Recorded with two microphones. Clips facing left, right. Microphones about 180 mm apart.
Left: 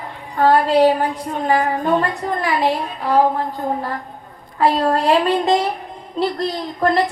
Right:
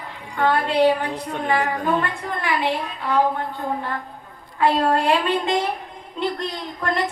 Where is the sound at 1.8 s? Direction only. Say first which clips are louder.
Left 4 dB; 30° left (ahead or behind).